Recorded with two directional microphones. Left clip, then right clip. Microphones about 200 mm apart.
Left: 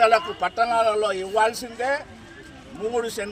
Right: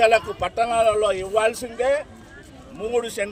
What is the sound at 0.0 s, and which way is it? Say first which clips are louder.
A man's voice: right 1 dB; 30° right (ahead or behind).